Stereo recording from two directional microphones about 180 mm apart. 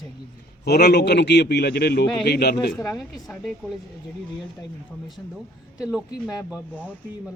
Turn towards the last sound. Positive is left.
turn(degrees=-5)  # may be behind; listen again after turning